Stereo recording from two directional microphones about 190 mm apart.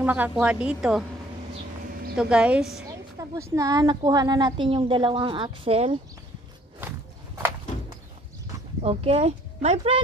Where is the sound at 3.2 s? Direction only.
15° right (ahead or behind).